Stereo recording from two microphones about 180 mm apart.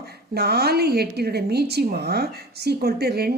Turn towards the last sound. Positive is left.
turn(degrees=-60)  # may be behind; listen again after turning